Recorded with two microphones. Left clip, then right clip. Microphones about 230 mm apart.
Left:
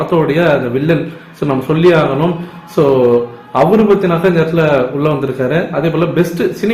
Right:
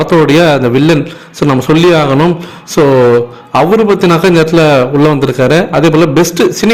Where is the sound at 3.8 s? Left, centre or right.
Right.